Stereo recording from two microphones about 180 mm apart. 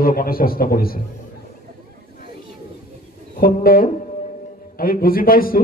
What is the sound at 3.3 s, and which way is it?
A man's voice, 55° left (ahead or behind).